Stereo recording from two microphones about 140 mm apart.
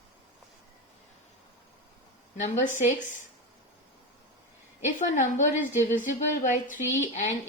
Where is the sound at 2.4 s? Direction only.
65° left (ahead or behind).